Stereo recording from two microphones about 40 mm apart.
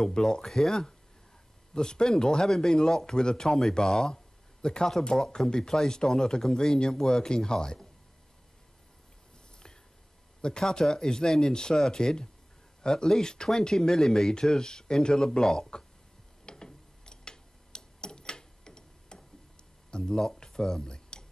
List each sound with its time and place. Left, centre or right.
0.0 s speech: centre
10.6 s speech: centre
16.4 s tick-tock: centre
19.9 s a sound: centre